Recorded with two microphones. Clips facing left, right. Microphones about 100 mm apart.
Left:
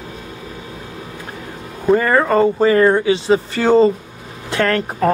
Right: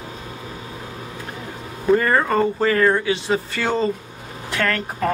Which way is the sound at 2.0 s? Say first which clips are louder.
Left 6 dB; 20° left (ahead or behind).